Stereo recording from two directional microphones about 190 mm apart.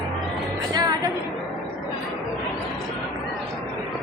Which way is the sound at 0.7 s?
20° right (ahead or behind).